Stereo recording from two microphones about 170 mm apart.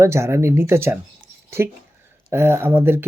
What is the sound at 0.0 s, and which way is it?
Speech, 15° right (ahead or behind).